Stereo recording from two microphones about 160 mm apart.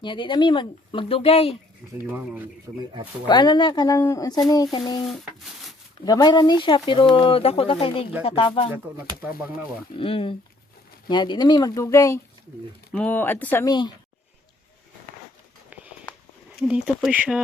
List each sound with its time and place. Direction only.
0.0 s speech: 30° left (ahead or behind)
2.0 s speech: 10° right (ahead or behind)
3.2 s speech: 25° left (ahead or behind)
5.0 s rub: centre (ahead or behind)
6.1 s speech: 25° left (ahead or behind)
9.9 s speech: 35° left (ahead or behind); by 13.7 s 10° left (ahead or behind)
13.7 s speech: 25° left (ahead or behind)
15.7 s a sound: 10° right (ahead or behind)
16.6 s rub: 5° right (ahead or behind)
17.1 s speech: 5° right (ahead or behind)